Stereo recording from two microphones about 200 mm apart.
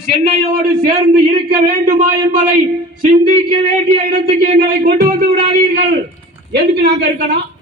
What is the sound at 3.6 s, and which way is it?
A man's voice, 45° right (ahead or behind).